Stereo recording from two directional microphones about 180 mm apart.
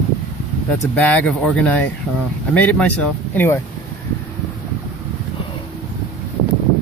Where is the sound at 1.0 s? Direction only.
10° left (ahead or behind).